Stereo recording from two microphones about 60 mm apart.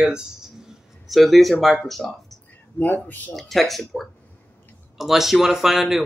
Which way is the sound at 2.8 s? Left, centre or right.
Left.